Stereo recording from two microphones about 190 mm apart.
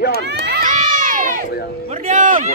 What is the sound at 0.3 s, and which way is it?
Crowd, 50° right (ahead or behind).